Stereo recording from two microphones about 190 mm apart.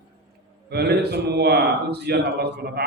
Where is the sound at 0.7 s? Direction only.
60° right (ahead or behind).